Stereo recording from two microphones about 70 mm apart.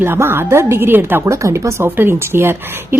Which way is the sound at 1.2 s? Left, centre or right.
Right.